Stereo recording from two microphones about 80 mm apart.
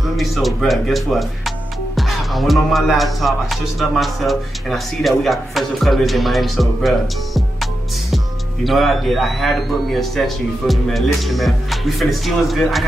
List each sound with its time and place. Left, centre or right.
0.0 s speech: centre
8.6 s speech: centre